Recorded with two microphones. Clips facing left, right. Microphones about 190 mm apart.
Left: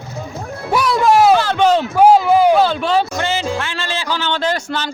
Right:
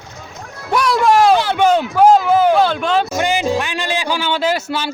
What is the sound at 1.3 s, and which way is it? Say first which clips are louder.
Speech: even; 10° right (ahead or behind).